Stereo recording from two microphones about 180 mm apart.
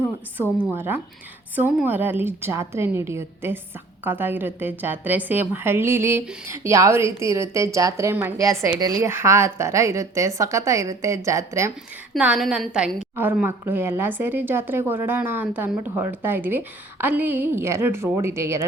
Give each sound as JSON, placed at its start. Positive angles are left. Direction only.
{"t": 0.6, "sound": "a woman's voice", "side_deg": -10}
{"t": 12.1, "sound": "a woman's voice", "side_deg": -5}